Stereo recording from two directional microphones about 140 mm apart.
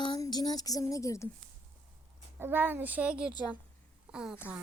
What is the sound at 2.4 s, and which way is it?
A child's voice, 15° right (ahead or behind).